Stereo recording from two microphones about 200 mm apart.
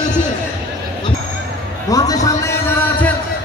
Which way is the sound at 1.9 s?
20° left (ahead or behind).